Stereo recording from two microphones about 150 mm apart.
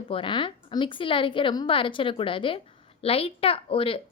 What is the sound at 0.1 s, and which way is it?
A woman's voice, 35° left (ahead or behind).